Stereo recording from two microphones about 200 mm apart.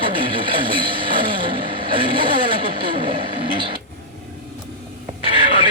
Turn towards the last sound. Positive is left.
turn(degrees=-25)  # may be behind; listen again after turning